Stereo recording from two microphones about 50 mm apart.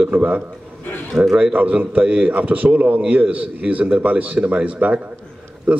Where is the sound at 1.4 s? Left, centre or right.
Right.